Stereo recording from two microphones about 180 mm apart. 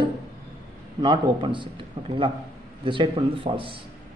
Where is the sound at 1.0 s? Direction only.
25° right (ahead or behind).